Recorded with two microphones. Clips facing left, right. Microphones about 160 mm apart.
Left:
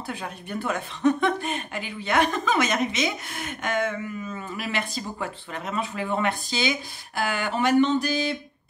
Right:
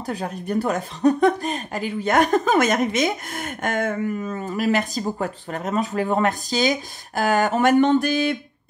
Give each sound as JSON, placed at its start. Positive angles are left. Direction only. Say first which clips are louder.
{"t": 0.0, "sound": "speech", "louder": "right 6 dB", "side_deg": -40}